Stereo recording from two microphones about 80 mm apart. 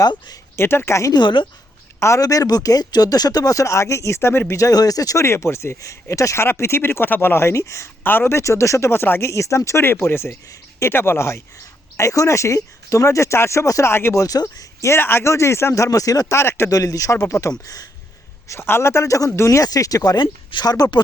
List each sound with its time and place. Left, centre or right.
0.0 s speech: left
0.5 s speech: left
1.1 s a woman's voice: left
2.0 s a man's voice: left
2.2 s speech: left
4.5 s speech: left
5.2 s speech: left
8.0 s speech: left
9.3 s speech: left
16.7 s speech: left
17.5 s speech: left
18.4 s speech: left